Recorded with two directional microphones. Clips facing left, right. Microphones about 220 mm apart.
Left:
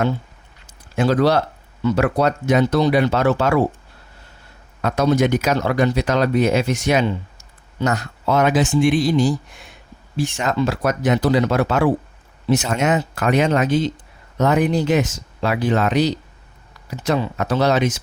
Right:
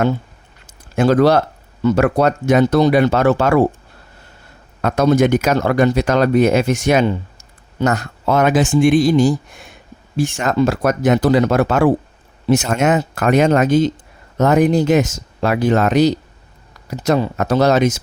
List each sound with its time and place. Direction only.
0.9 s speech: 50° right (ahead or behind)
4.8 s speech: 50° right (ahead or behind)